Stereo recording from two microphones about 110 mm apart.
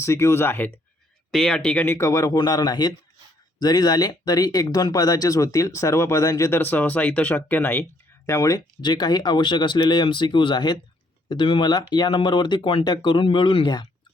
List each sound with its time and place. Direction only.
0.0 s speech: 25° left (ahead or behind)
1.3 s speech: 5° left (ahead or behind)
2.0 s speech: 30° left (ahead or behind)
8.3 s speech: 30° left (ahead or behind)
8.8 s speech: 40° left (ahead or behind)